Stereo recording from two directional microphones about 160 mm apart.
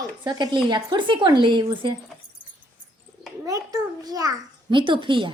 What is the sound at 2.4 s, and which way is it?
Keys jangling, 30° left (ahead or behind).